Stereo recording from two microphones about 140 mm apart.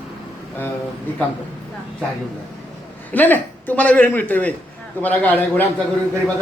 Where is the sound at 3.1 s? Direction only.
15° left (ahead or behind).